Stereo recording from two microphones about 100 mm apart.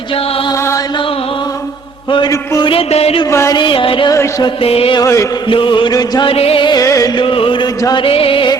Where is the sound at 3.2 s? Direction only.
30° left (ahead or behind).